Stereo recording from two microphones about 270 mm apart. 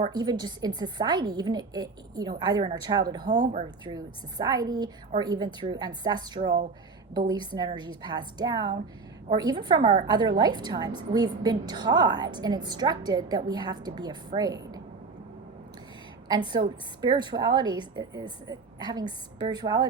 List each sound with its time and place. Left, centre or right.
0.0 s a woman's voice: centre
16.3 s a woman's voice: centre